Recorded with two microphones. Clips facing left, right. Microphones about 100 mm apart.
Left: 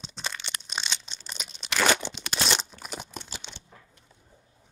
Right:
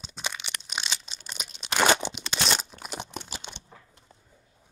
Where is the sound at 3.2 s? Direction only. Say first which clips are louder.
Right 2 dB; 10° right (ahead or behind).